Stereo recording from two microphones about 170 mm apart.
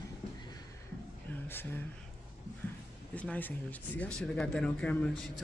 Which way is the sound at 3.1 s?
10° left (ahead or behind).